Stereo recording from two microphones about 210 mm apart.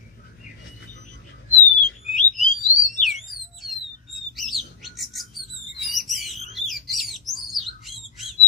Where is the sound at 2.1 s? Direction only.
40° left (ahead or behind).